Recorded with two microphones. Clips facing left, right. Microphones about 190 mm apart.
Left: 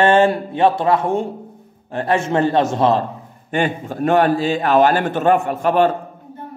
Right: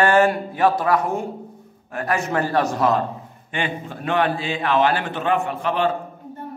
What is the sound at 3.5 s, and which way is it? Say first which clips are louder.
A man's voice: left 7 dB; 45° left (ahead or behind).